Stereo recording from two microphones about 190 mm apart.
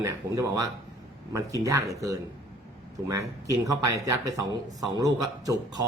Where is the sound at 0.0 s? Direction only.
15° right (ahead or behind).